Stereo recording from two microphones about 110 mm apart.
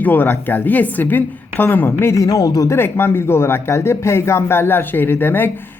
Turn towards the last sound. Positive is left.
turn(degrees=20)  # may be behind; listen again after turning